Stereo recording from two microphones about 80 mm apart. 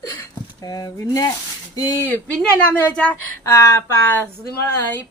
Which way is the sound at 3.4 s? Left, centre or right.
Left.